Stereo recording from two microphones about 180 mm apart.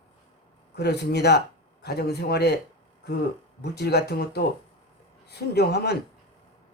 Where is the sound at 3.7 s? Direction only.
65° left (ahead or behind).